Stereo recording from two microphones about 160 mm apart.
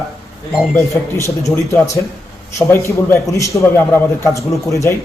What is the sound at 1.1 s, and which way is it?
A man's voice, 20° left (ahead or behind).